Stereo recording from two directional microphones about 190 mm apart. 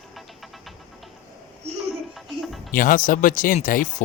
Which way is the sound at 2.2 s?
Centre (ahead or behind).